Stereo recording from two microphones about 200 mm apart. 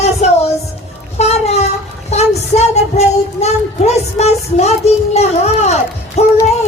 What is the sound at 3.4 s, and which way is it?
Speech, 35° left (ahead or behind).